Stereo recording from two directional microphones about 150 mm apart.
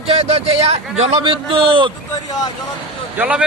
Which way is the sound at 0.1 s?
45° right (ahead or behind).